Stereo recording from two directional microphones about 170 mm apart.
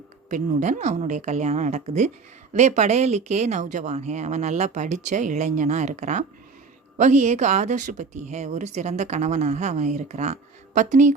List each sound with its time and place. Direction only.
0.3 s speech: 45° right (ahead or behind)